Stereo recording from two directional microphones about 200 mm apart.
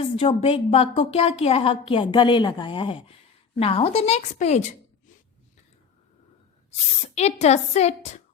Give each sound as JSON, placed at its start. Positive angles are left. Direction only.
{"t": 0.0, "sound": "a woman's voice", "side_deg": 30}
{"t": 7.2, "sound": "a woman's voice", "side_deg": 35}